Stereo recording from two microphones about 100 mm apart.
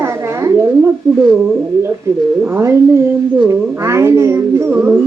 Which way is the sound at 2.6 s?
30° right (ahead or behind).